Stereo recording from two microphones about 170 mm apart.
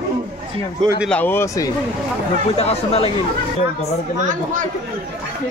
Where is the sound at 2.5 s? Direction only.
35° left (ahead or behind).